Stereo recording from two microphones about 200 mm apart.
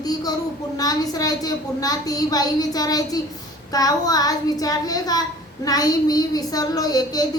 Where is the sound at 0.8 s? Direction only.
20° left (ahead or behind).